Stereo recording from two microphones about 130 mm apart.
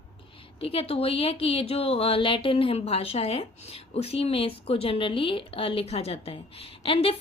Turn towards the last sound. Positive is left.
turn(degrees=45)  # may be behind; listen again after turning